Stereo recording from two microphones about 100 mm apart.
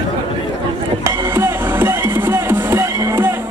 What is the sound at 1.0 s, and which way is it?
Music, 25° right (ahead or behind).